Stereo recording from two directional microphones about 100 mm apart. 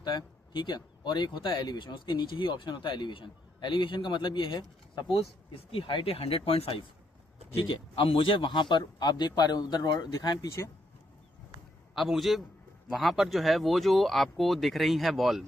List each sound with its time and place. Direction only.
0.0 s speech: 50° left (ahead or behind); by 6.8 s 75° left (ahead or behind)
7.5 s speech: 60° left (ahead or behind); by 10.5 s 40° left (ahead or behind)
11.9 s speech: centre (ahead or behind)